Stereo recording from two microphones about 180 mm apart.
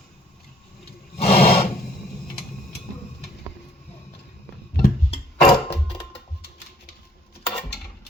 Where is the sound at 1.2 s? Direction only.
35° left (ahead or behind).